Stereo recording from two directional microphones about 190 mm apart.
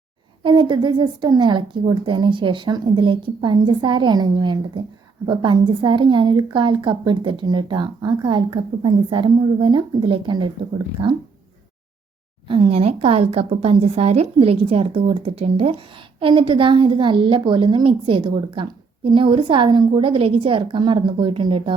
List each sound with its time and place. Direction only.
0.4 s a woman's voice: 25° right (ahead or behind)
12.5 s a woman's voice: 30° right (ahead or behind)